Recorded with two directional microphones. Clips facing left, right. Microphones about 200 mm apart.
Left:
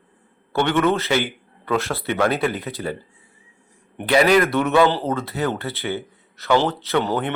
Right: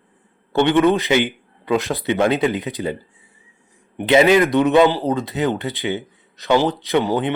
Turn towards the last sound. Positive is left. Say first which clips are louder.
# right 3 dB
turn(degrees=-15)  # may be behind; listen again after turning